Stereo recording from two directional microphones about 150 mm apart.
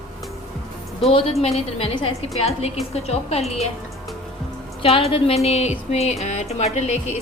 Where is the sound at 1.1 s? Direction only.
40° left (ahead or behind).